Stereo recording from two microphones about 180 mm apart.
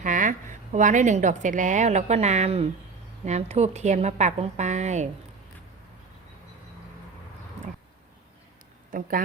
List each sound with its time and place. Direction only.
0.0 s a woman's voice: 45° right (ahead or behind)
8.9 s speech: 50° right (ahead or behind)